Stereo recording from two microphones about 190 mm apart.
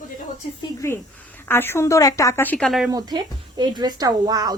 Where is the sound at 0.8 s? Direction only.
15° left (ahead or behind).